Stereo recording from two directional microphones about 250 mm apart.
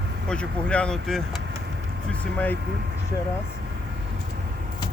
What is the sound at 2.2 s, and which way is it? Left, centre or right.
Speech, centre.